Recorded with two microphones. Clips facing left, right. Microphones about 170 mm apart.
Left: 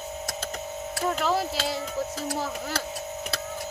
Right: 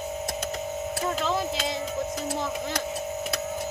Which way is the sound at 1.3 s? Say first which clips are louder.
Left 1 dB; 35° left (ahead or behind).